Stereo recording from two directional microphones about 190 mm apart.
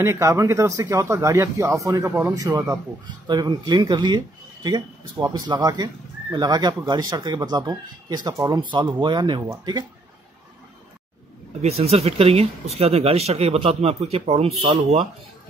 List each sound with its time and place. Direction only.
0.0 s speech: 15° right (ahead or behind)
11.6 s speech: 30° right (ahead or behind)